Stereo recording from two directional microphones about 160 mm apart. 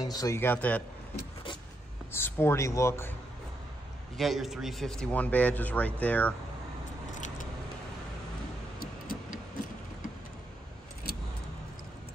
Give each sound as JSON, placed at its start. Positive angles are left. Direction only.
{"t": 0.0, "sound": "speech", "side_deg": 25}
{"t": 2.1, "sound": "speech", "side_deg": 15}
{"t": 4.2, "sound": "speech", "side_deg": 0}
{"t": 7.2, "sound": "keys jangling", "side_deg": 50}
{"t": 8.7, "sound": "vehicle", "side_deg": 65}